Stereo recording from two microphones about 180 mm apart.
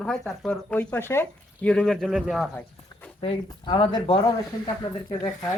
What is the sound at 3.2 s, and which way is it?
Speech, 30° left (ahead or behind).